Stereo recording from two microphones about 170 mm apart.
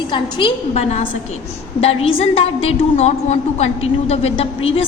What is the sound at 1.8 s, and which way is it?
A woman's voice, 35° left (ahead or behind).